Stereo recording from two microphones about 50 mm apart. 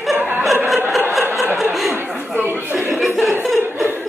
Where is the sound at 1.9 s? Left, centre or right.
Right.